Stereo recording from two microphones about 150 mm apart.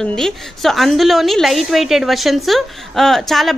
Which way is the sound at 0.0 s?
5° left (ahead or behind).